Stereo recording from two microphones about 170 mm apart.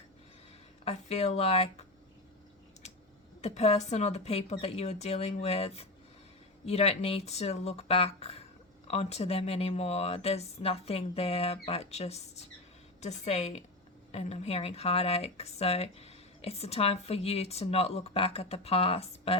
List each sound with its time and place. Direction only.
0.9 s speech: 40° left (ahead or behind)
3.4 s speech: 40° left (ahead or behind)